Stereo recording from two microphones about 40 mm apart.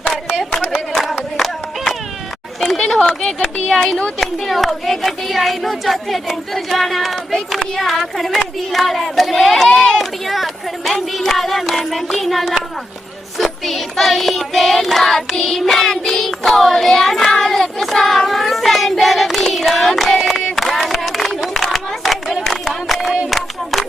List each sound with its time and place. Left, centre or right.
0.9 s clapping: centre
2.6 s a sound: centre
3.1 s speech: centre
4.2 s speech: centre
10.0 s speech: centre
13.4 s child singing: centre
19.7 s a sound: centre